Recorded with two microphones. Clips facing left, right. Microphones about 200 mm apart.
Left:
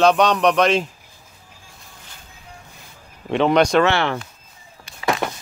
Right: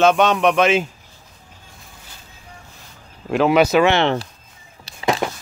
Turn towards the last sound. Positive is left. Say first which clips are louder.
# right 2 dB
turn(degrees=-5)  # may be behind; listen again after turning